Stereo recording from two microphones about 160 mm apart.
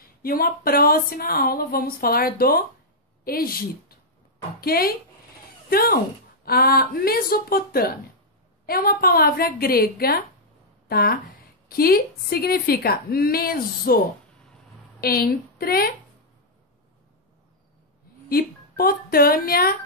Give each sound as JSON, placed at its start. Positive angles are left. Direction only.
{"t": 0.0, "sound": "a woman's voice", "side_deg": 70}
{"t": 15.0, "sound": "a woman's voice", "side_deg": 70}
{"t": 18.3, "sound": "a woman's voice", "side_deg": 70}